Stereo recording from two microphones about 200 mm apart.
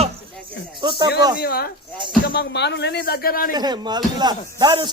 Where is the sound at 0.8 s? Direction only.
25° right (ahead or behind).